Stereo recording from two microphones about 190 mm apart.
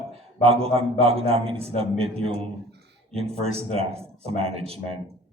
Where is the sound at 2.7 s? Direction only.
60° right (ahead or behind).